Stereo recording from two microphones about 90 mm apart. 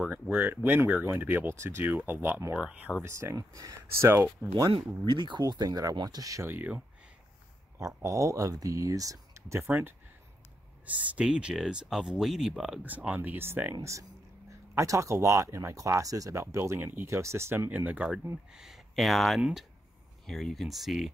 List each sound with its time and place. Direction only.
0.1 s speech: 20° right (ahead or behind)
3.0 s speech: 30° right (ahead or behind)
4.6 s speech: 65° right (ahead or behind); by 6.4 s 40° right (ahead or behind)
6.4 s speech: 25° right (ahead or behind)
7.8 s speech: 35° right (ahead or behind); by 12.8 s 5° right (ahead or behind)
12.8 s speech: 15° right (ahead or behind)
14.5 s speech: 35° right (ahead or behind); by 18.0 s 20° right (ahead or behind)
18.5 s speech: 5° right (ahead or behind)